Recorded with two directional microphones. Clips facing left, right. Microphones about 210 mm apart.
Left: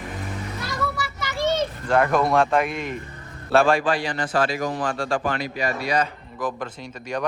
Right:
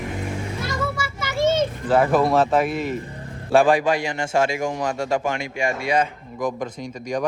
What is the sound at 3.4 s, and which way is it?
A man's voice, 15° right (ahead or behind).